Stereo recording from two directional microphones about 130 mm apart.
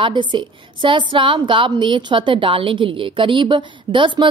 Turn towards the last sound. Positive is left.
turn(degrees=-40)  # may be behind; listen again after turning